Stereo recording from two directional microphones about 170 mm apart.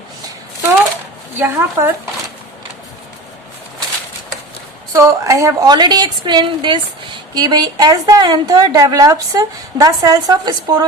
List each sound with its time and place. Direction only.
1.4 s a woman's voice: 15° right (ahead or behind)
4.9 s a woman's voice: 20° right (ahead or behind)